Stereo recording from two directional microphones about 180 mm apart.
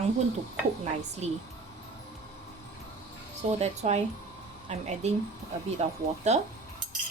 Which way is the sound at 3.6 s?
40° right (ahead or behind).